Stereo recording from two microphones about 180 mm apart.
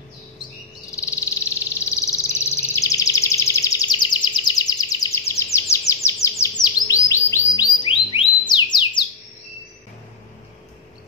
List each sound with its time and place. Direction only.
0.9 s frog: 15° left (ahead or behind)
1.9 s a sound: 15° left (ahead or behind)
6.4 s chirp: 20° left (ahead or behind)